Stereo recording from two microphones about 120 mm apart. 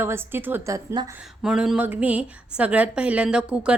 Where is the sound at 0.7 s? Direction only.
35° right (ahead or behind).